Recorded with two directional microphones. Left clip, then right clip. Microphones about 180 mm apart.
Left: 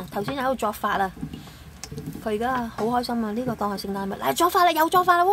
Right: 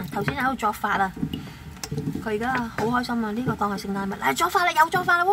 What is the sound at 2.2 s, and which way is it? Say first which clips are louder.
Speech: left 1 dB; 20° left (ahead or behind).